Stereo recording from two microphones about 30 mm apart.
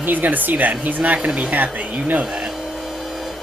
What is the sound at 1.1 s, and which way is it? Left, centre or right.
Speech, right.